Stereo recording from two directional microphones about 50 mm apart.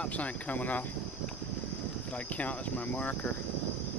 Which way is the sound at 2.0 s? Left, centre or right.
Left.